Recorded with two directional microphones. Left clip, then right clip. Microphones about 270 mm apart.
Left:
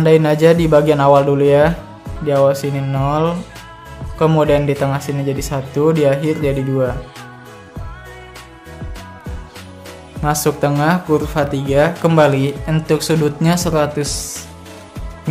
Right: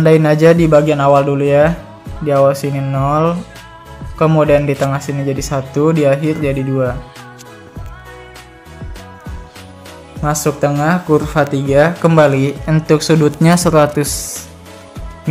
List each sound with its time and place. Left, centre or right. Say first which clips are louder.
0.0 s speech: right 2 dB; centre
10.2 s speech: right 1 dB; centre